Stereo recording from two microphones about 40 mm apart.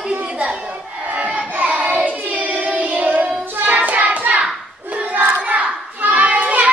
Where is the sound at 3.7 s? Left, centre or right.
Right.